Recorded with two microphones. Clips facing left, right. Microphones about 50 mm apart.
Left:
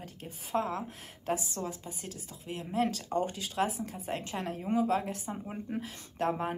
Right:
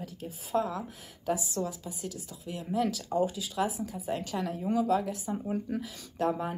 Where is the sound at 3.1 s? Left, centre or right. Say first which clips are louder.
Right 3 dB; left.